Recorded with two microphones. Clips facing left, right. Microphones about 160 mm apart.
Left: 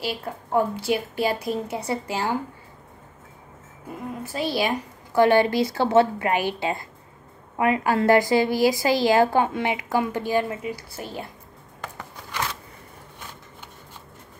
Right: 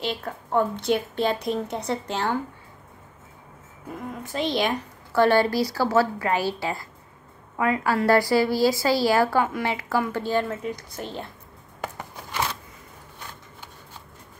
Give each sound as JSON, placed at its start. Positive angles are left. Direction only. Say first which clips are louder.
{"t": 0.5, "sound": "a woman's voice", "louder": "even", "side_deg": 10}
{"t": 4.2, "sound": "a woman's voice", "louder": "even", "side_deg": 5}